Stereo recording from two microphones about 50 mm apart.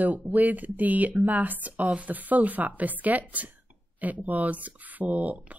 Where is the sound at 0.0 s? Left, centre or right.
Right.